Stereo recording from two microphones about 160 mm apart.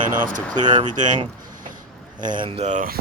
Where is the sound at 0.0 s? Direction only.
55° right (ahead or behind).